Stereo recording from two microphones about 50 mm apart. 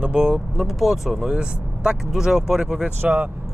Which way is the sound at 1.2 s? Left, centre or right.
Centre.